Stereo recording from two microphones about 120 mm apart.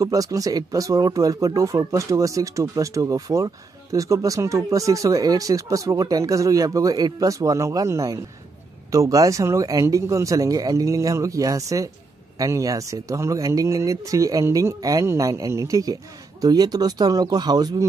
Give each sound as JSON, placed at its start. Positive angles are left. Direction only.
{"t": 0.0, "sound": "speech", "side_deg": -30}